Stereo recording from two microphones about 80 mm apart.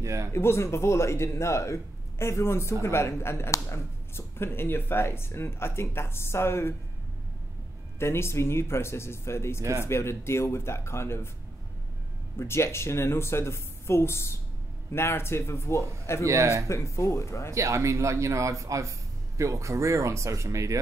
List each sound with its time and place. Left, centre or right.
0.0 s speech: right
0.3 s speech: left
8.0 s speech: left
12.4 s speech: left
16.3 s speech: right
16.6 s speech: left
17.5 s speech: right